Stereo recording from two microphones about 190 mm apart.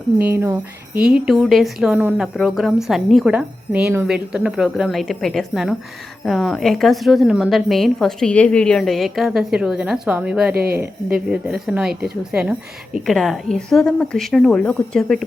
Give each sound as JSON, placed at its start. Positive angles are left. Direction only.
{"t": 0.3, "sound": "a woman's voice", "side_deg": -10}
{"t": 10.5, "sound": "speech", "side_deg": -55}
{"t": 11.3, "sound": "a woman's voice", "side_deg": -5}